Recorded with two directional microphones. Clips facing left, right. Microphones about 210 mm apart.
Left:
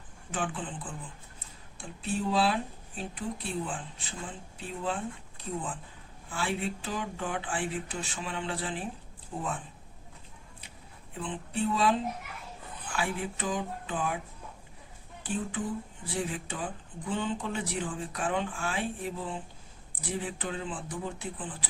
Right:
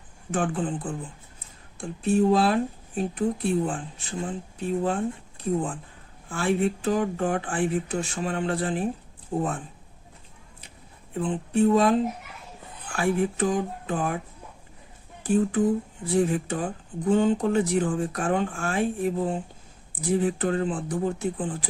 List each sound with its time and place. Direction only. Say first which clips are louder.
0.3 s speech: right 8 dB; 45° right (ahead or behind)
2.0 s speech: right 8 dB; 45° right (ahead or behind)
6.2 s speech: right 9 dB; 45° right (ahead or behind)
11.2 s speech: right 10 dB; 45° right (ahead or behind)
15.2 s speech: right 11 dB; 45° right (ahead or behind)